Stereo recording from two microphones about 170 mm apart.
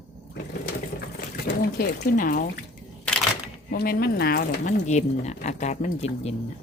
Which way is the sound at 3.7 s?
65° left (ahead or behind).